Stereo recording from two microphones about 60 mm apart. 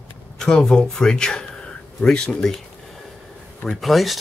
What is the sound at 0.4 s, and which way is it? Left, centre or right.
Speech, centre.